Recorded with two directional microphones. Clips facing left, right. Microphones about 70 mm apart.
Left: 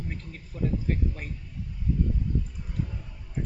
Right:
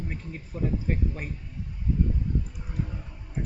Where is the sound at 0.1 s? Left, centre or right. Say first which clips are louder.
Right 3 dB; centre.